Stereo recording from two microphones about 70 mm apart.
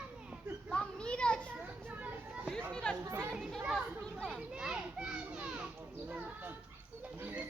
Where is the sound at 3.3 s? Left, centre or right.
Centre.